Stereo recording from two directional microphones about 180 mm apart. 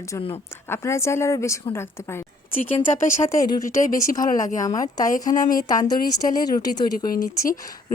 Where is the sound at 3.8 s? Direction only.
50° left (ahead or behind).